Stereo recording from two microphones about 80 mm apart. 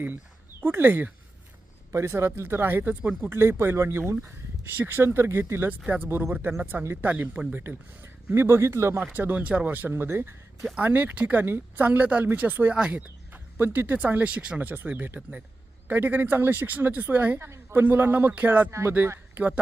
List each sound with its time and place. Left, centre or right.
0.6 s speech: right
1.9 s speech: right; by 3.3 s centre
3.3 s speech: right
9.1 s speech: right
10.8 s speech: centre
18.7 s speech: right